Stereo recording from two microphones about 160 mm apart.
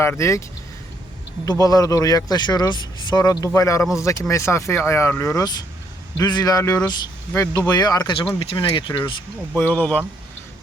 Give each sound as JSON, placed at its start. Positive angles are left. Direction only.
{"t": 0.0, "sound": "speech", "side_deg": 15}
{"t": 1.5, "sound": "speech", "side_deg": 20}
{"t": 9.6, "sound": "speech", "side_deg": 10}